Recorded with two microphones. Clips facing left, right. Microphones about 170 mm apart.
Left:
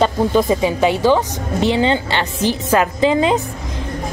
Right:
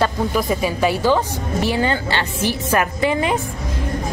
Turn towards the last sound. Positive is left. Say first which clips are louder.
# left 4 dB
turn(degrees=20)  # may be behind; listen again after turning